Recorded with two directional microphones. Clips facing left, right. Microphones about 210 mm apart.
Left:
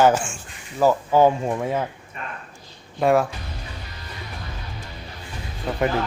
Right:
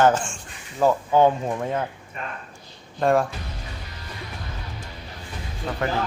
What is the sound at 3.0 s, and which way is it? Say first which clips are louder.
Speech: left 2 dB; 5° left (ahead or behind).